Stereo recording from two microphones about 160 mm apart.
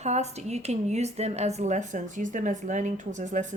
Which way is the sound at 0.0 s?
45° right (ahead or behind).